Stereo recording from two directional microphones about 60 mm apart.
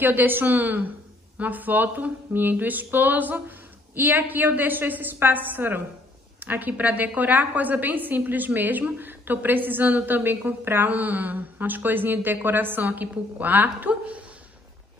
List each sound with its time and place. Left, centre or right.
0.0 s a woman's voice: right